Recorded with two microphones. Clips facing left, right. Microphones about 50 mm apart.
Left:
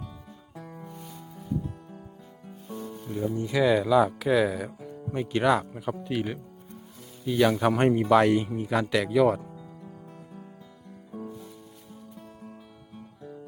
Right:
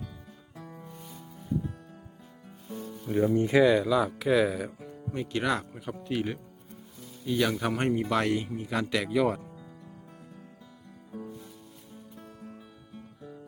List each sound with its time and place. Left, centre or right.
3.1 s speech: right
3.6 s speech: centre
5.1 s speech: centre
7.8 s speech: centre